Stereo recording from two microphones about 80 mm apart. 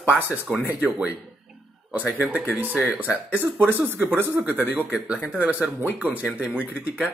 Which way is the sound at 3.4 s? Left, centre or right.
Right.